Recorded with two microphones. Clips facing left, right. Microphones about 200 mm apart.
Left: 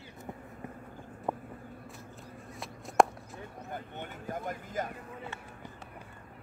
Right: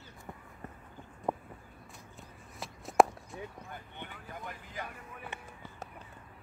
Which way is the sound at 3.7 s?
45° left (ahead or behind).